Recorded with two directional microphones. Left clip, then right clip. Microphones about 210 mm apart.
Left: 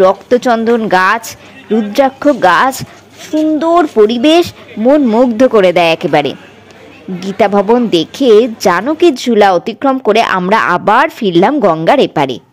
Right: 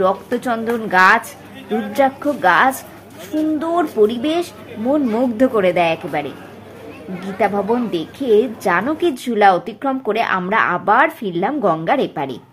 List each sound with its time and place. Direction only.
0.0 s a woman's voice: 45° left (ahead or behind)